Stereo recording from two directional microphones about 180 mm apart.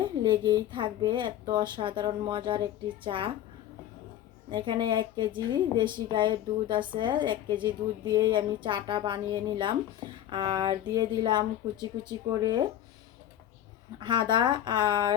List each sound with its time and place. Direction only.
0.0 s a woman's voice: 25° right (ahead or behind)
4.5 s a woman's voice: 25° right (ahead or behind)
14.0 s a woman's voice: 25° right (ahead or behind)